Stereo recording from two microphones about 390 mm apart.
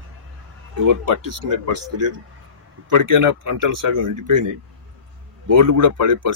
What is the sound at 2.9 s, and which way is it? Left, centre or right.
Speech, right.